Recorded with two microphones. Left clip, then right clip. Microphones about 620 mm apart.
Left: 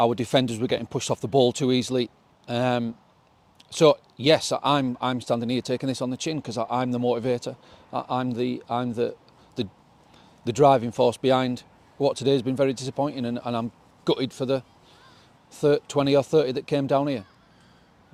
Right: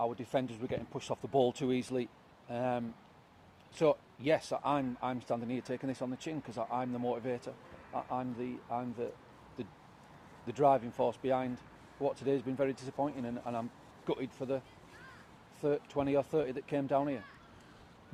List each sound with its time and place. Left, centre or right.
0.0 s speech: left
2.5 s speech: left
7.9 s a man's voice: left
10.4 s speech: left
15.6 s speech: left